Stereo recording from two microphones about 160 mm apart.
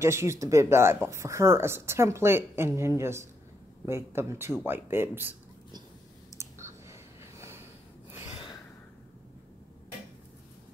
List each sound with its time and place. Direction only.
0.0 s speech: 15° right (ahead or behind)
6.3 s clicking: 20° right (ahead or behind)